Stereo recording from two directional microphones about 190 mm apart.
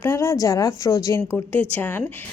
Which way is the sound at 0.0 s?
15° left (ahead or behind).